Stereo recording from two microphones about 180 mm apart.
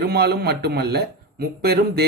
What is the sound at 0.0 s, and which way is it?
A man's voice, 60° right (ahead or behind).